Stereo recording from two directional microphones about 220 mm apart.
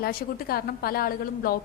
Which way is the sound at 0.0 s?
45° left (ahead or behind).